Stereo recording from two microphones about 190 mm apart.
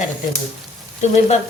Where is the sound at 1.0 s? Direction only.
35° left (ahead or behind).